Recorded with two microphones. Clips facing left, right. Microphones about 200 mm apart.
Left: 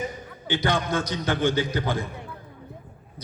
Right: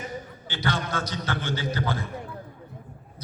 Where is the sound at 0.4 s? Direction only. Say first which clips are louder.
Left 5 dB; 15° left (ahead or behind).